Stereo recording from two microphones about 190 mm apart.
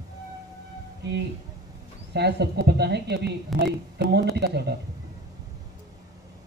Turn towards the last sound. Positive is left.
turn(degrees=-60)  # may be behind; listen again after turning